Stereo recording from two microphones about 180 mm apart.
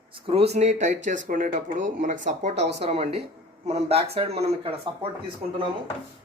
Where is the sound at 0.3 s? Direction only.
35° right (ahead or behind).